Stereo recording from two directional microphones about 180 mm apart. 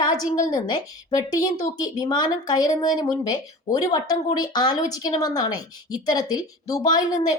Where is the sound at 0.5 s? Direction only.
20° left (ahead or behind).